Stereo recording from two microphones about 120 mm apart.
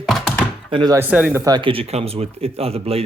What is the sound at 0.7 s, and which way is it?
Speech, 45° right (ahead or behind).